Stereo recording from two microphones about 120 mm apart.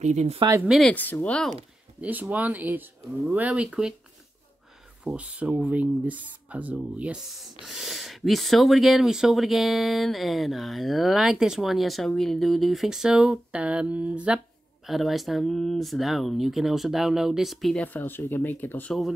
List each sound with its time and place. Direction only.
0.0 s speech: 75° right (ahead or behind)
0.7 s speech: centre (ahead or behind)
0.9 s speech: 15° left (ahead or behind)
2.0 s speech: 15° right (ahead or behind)
5.0 s speech: 10° right (ahead or behind)
17.8 s speech: 15° left (ahead or behind)